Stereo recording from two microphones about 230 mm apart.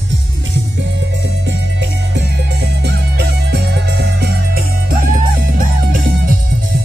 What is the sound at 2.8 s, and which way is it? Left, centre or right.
Music, right.